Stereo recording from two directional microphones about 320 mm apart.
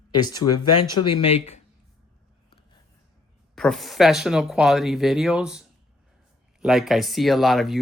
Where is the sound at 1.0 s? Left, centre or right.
Left.